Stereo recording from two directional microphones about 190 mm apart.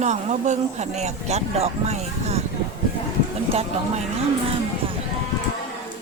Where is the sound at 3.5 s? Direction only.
30° right (ahead or behind).